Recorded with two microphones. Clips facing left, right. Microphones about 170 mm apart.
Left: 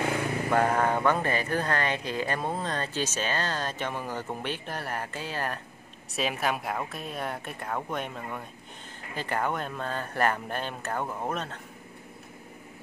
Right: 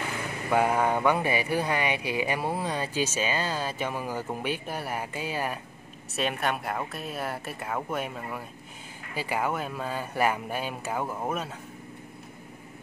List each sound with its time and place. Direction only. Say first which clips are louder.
0.5 s speech: right 1 dB; 10° right (ahead or behind)
6.1 s speech: even; centre (ahead or behind)